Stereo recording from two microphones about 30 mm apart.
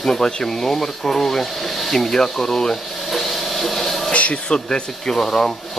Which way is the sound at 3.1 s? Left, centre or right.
Centre.